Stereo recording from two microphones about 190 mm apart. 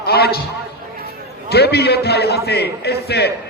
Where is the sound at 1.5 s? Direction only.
60° left (ahead or behind).